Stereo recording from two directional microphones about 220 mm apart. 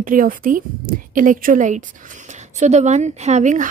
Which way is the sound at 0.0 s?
40° right (ahead or behind).